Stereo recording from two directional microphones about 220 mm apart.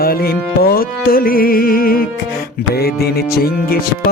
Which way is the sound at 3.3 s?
45° left (ahead or behind).